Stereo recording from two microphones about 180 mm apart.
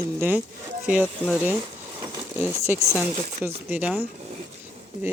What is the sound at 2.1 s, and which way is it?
Speech, 15° right (ahead or behind).